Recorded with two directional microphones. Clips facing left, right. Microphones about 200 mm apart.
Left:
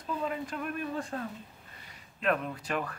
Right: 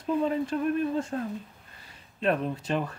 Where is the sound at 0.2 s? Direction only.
30° right (ahead or behind).